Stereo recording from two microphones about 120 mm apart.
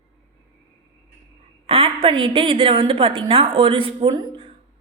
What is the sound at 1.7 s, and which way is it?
A woman's voice, 50° right (ahead or behind).